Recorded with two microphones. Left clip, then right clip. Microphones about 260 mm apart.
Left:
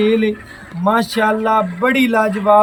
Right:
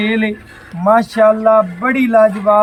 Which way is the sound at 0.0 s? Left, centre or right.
Centre.